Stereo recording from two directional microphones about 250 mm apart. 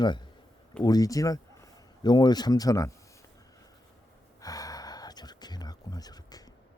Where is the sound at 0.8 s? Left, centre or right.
Centre.